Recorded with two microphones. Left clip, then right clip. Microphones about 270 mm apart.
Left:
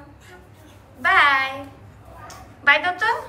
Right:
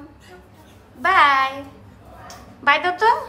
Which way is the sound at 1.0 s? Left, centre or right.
Centre.